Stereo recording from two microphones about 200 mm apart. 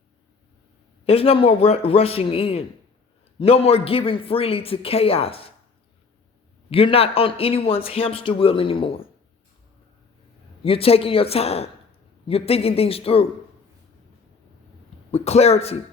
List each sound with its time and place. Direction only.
1.0 s a man's voice: 30° left (ahead or behind)
6.7 s a man's voice: 30° left (ahead or behind)
10.6 s a man's voice: 30° left (ahead or behind)
15.1 s speech: 30° left (ahead or behind)